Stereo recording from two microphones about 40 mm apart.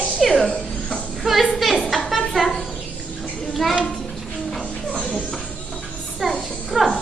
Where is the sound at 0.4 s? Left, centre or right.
Left.